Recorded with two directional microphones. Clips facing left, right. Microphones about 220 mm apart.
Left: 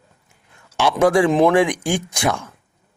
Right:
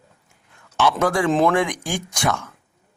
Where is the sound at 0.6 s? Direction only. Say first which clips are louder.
Even; 10° left (ahead or behind).